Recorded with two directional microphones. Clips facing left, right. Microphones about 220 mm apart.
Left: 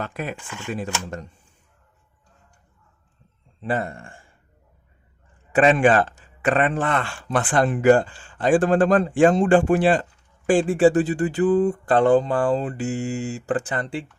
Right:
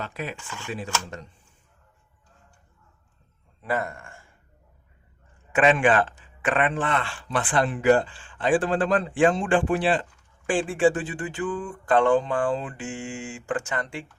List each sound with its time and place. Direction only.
0.0 s speech: 50° left (ahead or behind)
3.6 s speech: 30° left (ahead or behind)
5.5 s speech: 35° left (ahead or behind)